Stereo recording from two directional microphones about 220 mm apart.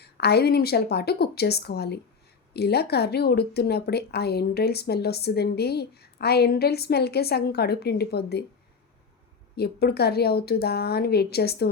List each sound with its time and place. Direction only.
0.0 s speech: 45° left (ahead or behind)
9.6 s speech: 45° left (ahead or behind)